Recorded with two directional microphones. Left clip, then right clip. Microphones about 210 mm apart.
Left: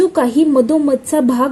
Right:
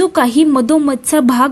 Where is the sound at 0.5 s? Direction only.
90° right.